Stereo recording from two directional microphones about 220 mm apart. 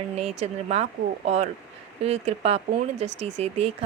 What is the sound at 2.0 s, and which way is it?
A woman's voice, 30° right (ahead or behind).